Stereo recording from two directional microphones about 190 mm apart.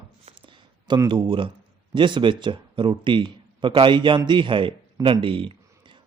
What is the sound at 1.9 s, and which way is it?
A man's voice, 25° right (ahead or behind).